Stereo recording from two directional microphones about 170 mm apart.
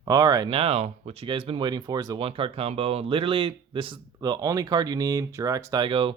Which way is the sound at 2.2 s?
35° right (ahead or behind).